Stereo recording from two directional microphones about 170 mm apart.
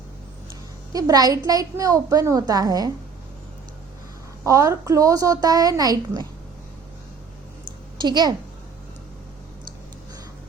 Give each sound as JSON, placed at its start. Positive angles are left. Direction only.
{"t": 0.9, "sound": "a woman's voice", "side_deg": -20}
{"t": 4.4, "sound": "a woman's voice", "side_deg": -20}
{"t": 8.0, "sound": "a woman's voice", "side_deg": -25}